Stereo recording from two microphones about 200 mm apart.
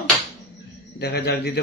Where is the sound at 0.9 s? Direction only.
55° left (ahead or behind).